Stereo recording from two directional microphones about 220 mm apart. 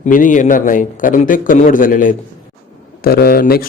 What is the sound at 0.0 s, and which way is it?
A man's voice, 35° left (ahead or behind).